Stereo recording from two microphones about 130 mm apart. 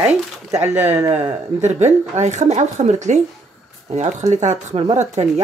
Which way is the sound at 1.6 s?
60° right (ahead or behind).